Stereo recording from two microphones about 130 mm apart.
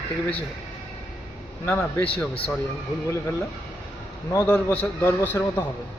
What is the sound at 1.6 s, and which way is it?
Speech, 15° left (ahead or behind).